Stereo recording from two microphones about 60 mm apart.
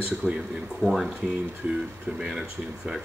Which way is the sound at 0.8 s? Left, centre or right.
Centre.